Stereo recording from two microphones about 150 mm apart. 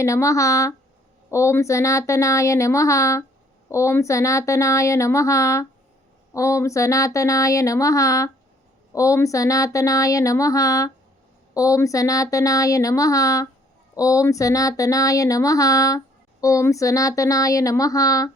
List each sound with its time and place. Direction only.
0.0 s speech: 20° left (ahead or behind)